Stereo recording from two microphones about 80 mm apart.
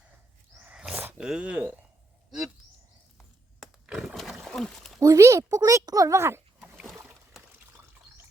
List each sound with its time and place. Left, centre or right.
0.7 s dog: centre
1.2 s speech: centre
3.8 s a sound: centre
4.1 s wild animals: centre
4.4 s a sound: centre
4.9 s speech: right
6.1 s speech: right
6.6 s rowboat: centre